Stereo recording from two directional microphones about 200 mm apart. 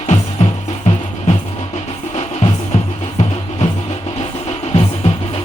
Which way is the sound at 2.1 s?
30° left (ahead or behind).